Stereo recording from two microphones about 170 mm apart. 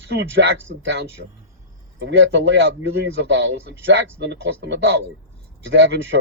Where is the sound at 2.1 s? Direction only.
90° right.